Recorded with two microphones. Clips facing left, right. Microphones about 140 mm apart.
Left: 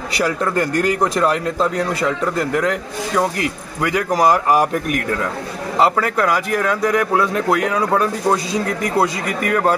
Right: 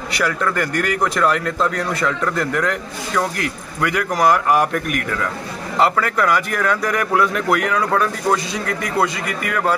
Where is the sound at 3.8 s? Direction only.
30° left (ahead or behind).